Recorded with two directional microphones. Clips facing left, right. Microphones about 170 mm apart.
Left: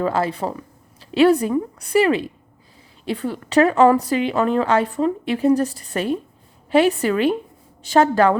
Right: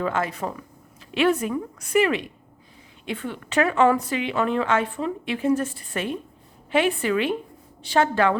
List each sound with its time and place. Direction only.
0.0 s a woman's voice: 35° left (ahead or behind)